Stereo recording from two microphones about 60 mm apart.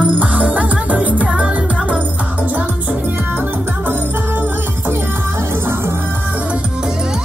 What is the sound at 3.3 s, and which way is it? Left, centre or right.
Music, right.